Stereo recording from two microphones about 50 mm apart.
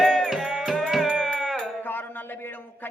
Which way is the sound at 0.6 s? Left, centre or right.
Centre.